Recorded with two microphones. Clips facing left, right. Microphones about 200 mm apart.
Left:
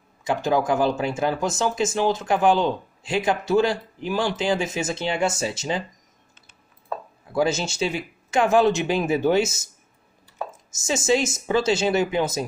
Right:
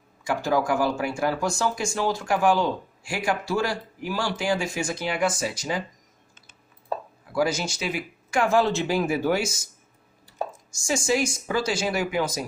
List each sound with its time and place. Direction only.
0.2 s speech: 20° left (ahead or behind)
7.3 s speech: 25° left (ahead or behind)
10.7 s speech: 20° left (ahead or behind)